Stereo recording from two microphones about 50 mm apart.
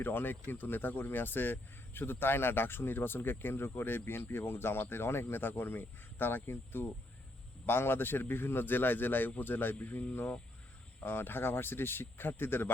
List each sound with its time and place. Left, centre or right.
0.0 s speech: left
9.7 s speech: left
11.0 s speech: left